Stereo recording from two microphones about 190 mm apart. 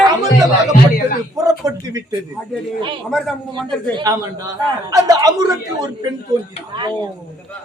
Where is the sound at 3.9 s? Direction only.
20° right (ahead or behind).